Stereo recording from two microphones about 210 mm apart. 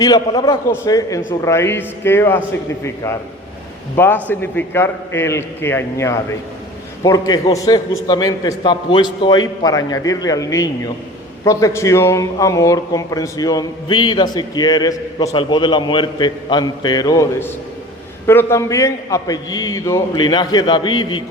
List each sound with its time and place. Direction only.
0.0 s a man's voice: 20° left (ahead or behind)